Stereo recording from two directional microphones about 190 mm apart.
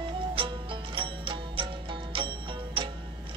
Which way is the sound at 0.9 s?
25° right (ahead or behind).